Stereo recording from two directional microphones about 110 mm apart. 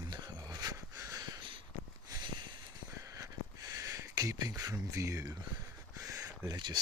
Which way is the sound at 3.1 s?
35° right (ahead or behind).